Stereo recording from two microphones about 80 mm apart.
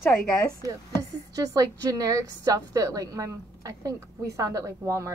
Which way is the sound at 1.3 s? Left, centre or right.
Right.